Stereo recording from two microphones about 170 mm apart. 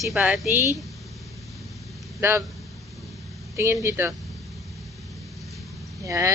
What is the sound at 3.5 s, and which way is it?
Speech, 15° right (ahead or behind).